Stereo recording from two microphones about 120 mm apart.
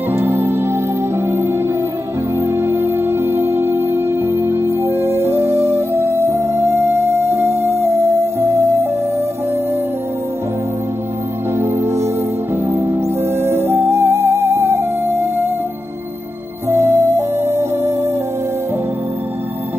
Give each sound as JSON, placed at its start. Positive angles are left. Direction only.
{"t": 0.1, "sound": "music", "side_deg": -20}
{"t": 11.5, "sound": "music", "side_deg": -20}
{"t": 16.6, "sound": "music", "side_deg": -25}